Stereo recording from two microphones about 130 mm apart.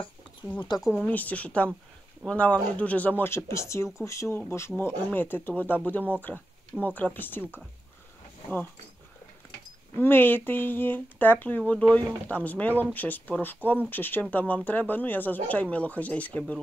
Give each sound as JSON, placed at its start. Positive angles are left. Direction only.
{"t": 0.6, "sound": "speech", "side_deg": 35}
{"t": 0.9, "sound": "speech", "side_deg": 10}
{"t": 6.7, "sound": "speech", "side_deg": -5}
{"t": 7.2, "sound": "speech", "side_deg": 15}
{"t": 9.9, "sound": "speech", "side_deg": 15}